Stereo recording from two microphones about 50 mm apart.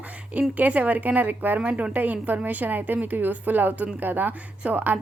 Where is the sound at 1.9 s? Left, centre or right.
Right.